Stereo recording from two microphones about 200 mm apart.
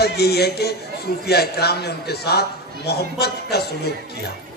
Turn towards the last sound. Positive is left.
turn(degrees=55)  # may be behind; listen again after turning